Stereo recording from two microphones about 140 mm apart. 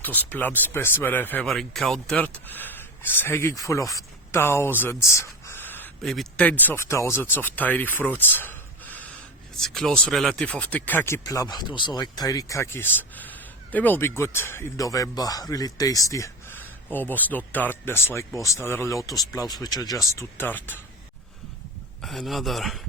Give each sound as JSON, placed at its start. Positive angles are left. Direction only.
{"t": 0.0, "sound": "speech", "side_deg": 15}
{"t": 1.5, "sound": "speech", "side_deg": 0}
{"t": 22.0, "sound": "speech", "side_deg": 0}